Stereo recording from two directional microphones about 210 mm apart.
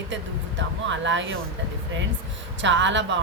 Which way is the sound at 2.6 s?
60° right (ahead or behind).